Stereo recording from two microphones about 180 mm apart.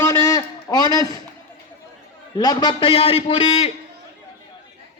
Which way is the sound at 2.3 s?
20° left (ahead or behind).